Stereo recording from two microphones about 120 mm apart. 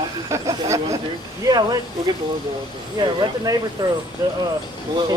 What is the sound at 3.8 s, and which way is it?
Speech, 35° right (ahead or behind).